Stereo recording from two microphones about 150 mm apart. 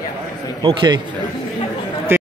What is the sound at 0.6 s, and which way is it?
Speech, 40° right (ahead or behind).